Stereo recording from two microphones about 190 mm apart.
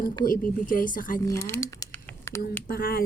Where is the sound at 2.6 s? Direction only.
50° left (ahead or behind).